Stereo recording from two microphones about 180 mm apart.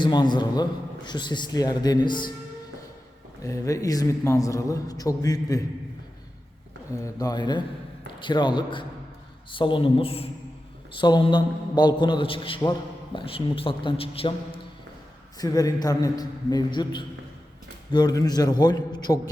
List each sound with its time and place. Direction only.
0.0 s a man's voice: 25° left (ahead or behind)
3.4 s a man's voice: 20° left (ahead or behind)
6.9 s a man's voice: 20° left (ahead or behind)